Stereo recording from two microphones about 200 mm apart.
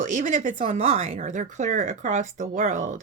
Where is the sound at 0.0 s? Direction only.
40° right (ahead or behind).